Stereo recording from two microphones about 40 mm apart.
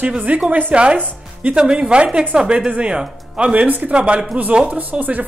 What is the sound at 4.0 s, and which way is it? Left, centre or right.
Speech, right.